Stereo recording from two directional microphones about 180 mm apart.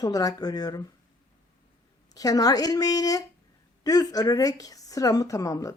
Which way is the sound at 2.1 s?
20° left (ahead or behind).